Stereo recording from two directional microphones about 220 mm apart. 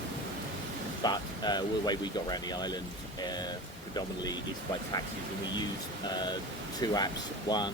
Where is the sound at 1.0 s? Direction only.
20° left (ahead or behind).